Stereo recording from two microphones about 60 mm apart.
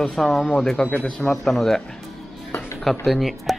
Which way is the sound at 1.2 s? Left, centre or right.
Centre.